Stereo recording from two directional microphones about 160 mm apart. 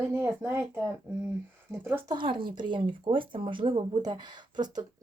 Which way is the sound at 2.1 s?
30° right (ahead or behind).